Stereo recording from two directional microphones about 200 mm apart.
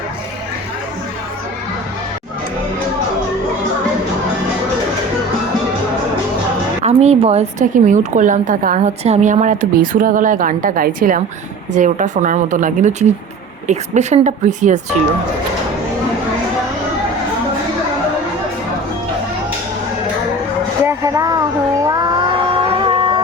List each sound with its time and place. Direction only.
6.8 s a woman's voice: 30° right (ahead or behind)
20.8 s a sound: 15° right (ahead or behind)
21.8 s music: 20° right (ahead or behind)